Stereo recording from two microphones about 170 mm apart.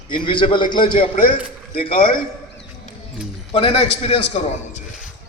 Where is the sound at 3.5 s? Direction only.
35° left (ahead or behind).